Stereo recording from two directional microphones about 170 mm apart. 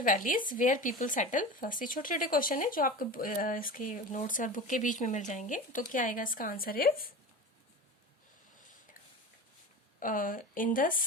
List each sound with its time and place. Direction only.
0.0 s speech: 50° left (ahead or behind)
8.5 s a sound: 50° left (ahead or behind)
10.0 s speech: 55° left (ahead or behind)